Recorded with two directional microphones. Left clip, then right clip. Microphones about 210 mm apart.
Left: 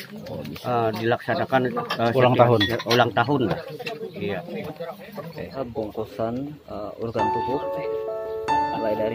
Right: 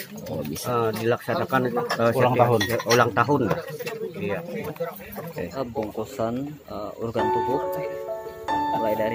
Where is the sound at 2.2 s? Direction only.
45° left (ahead or behind).